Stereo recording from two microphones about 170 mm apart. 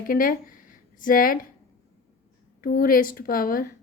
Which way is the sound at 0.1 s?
55° left (ahead or behind).